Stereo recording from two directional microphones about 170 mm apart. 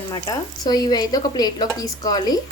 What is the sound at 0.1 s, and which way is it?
Speech, 25° left (ahead or behind).